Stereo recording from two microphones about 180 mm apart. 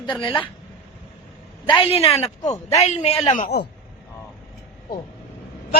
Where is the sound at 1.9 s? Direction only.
35° left (ahead or behind).